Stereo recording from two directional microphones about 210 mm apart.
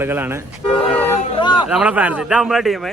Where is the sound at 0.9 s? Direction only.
25° left (ahead or behind).